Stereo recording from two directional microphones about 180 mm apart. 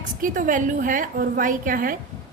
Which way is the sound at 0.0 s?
45° right (ahead or behind).